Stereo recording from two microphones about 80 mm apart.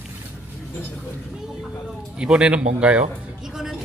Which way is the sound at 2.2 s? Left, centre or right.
Centre.